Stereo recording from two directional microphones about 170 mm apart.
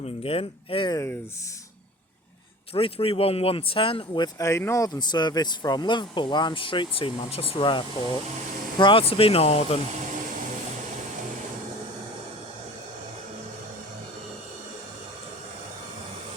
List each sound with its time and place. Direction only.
0.0 s speech: 35° left (ahead or behind)
0.9 s speech: 15° left (ahead or behind)
2.7 s speech: 35° left (ahead or behind)